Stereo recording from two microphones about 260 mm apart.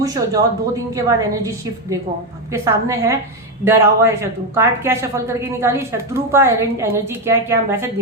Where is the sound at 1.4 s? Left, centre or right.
Centre.